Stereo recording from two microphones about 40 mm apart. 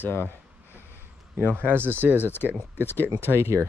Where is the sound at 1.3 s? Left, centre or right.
Right.